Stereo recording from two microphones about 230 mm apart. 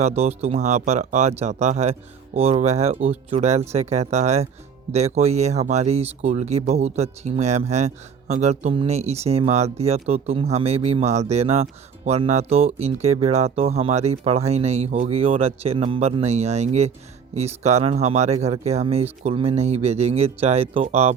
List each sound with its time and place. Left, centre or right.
0.0 s speech: right